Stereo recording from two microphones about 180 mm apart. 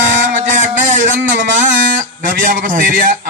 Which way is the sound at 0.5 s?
45° right (ahead or behind).